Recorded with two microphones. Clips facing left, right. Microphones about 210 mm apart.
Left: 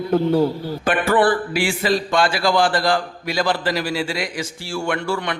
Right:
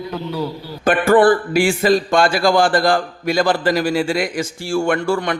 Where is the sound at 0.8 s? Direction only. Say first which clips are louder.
Right 5 dB; 45° right (ahead or behind).